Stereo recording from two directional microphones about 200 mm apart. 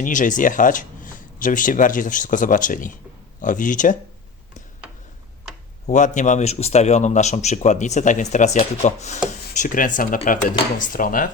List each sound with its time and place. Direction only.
0.0 s a man's voice: 40° left (ahead or behind)
5.8 s a man's voice: 40° left (ahead or behind)